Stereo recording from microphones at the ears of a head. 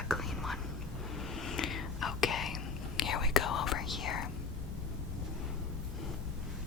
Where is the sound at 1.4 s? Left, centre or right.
Left.